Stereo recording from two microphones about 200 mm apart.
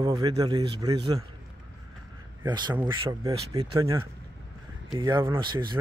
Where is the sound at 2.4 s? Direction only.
20° right (ahead or behind).